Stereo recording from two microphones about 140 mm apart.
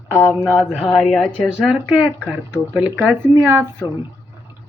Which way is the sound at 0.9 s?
5° left (ahead or behind).